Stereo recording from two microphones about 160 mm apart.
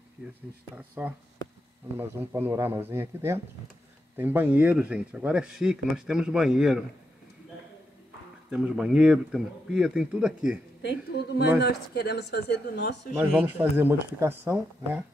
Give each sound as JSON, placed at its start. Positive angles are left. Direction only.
{"t": 0.7, "sound": "speech", "side_deg": -10}
{"t": 8.5, "sound": "speech", "side_deg": -5}
{"t": 10.8, "sound": "speech", "side_deg": 90}
{"t": 13.3, "sound": "speech", "side_deg": -10}